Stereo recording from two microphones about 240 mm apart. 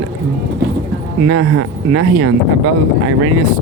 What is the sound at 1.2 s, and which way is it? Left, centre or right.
Speech, right.